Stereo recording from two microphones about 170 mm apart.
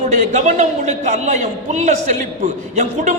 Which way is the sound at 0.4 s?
45° right (ahead or behind).